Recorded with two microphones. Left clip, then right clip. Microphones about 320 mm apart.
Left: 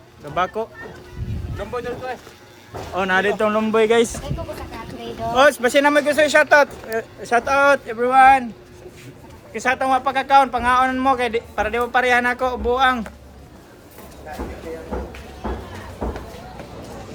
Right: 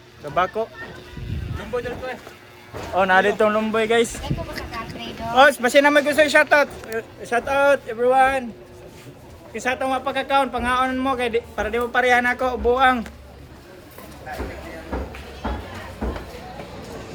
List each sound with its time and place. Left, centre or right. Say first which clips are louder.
0.3 s speech: right 1 dB; centre
1.7 s a man's voice: even; centre
2.9 s a man's voice: right 2 dB; centre
5.3 s a man's voice: right 1 dB; centre
9.5 s a man's voice: left 4 dB; centre